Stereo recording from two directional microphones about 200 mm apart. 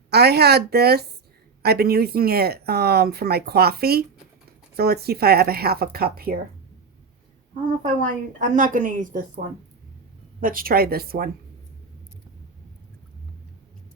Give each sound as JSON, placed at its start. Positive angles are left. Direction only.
{"t": 0.1, "sound": "speech", "side_deg": -55}
{"t": 8.4, "sound": "a woman's voice", "side_deg": -40}
{"t": 10.4, "sound": "speech", "side_deg": -45}